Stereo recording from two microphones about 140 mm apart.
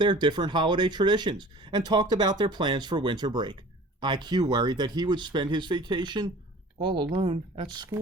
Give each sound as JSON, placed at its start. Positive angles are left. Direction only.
{"t": 0.0, "sound": "speech", "side_deg": -35}